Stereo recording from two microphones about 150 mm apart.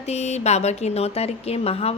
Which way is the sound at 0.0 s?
45° left (ahead or behind).